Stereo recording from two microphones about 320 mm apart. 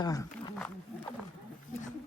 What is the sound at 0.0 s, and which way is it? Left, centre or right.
Wild animals, centre.